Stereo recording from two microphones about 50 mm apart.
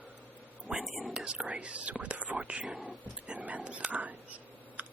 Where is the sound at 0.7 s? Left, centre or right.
Right.